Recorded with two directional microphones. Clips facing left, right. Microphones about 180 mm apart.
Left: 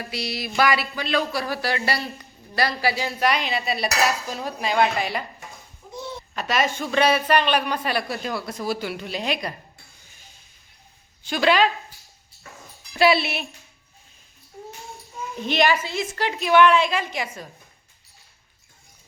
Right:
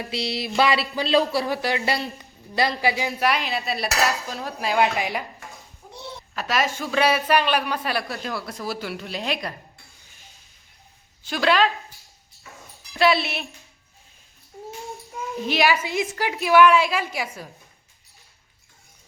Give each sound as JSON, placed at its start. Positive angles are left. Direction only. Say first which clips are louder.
{"t": 0.0, "sound": "speech", "louder": "right 2 dB", "side_deg": -25}
{"t": 1.6, "sound": "a woman's voice", "louder": "right 1 dB", "side_deg": -20}
{"t": 3.2, "sound": "speech", "louder": "left 1 dB", "side_deg": 0}
{"t": 4.9, "sound": "a woman's voice", "louder": "even", "side_deg": -15}
{"t": 6.3, "sound": "speech", "louder": "left 1 dB", "side_deg": 0}
{"t": 11.2, "sound": "a woman's voice", "louder": "left 1 dB", "side_deg": 0}
{"t": 15.4, "sound": "a woman's voice", "louder": "left 1 dB", "side_deg": -5}
{"t": 16.5, "sound": "speech", "louder": "right 1 dB", "side_deg": 0}